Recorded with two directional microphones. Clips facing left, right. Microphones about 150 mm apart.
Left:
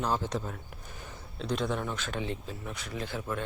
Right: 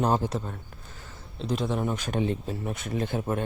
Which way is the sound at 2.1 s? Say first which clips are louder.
Right 7 dB; 50° right (ahead or behind).